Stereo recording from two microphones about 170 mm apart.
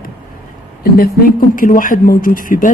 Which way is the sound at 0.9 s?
60° left (ahead or behind).